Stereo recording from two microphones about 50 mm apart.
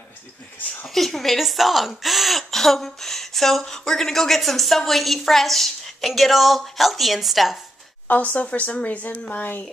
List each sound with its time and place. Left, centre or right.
0.8 s speech: centre
8.1 s a woman's voice: left